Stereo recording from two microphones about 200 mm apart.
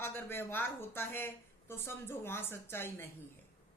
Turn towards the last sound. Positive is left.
turn(degrees=10)  # may be behind; listen again after turning